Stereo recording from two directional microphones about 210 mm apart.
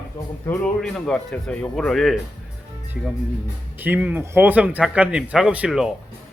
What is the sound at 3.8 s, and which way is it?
Speech, 10° right (ahead or behind).